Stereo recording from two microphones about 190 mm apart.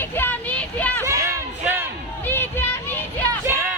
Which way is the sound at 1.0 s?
15° right (ahead or behind).